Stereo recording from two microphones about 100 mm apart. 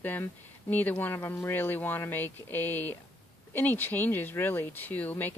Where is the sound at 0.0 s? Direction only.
20° left (ahead or behind).